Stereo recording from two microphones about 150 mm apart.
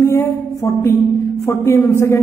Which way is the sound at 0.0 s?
20° left (ahead or behind).